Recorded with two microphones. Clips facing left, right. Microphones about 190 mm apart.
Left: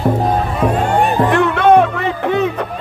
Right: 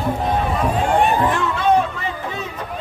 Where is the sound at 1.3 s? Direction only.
65° left (ahead or behind).